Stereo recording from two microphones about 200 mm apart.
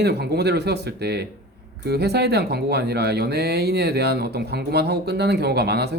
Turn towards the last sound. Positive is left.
turn(degrees=-55)  # may be behind; listen again after turning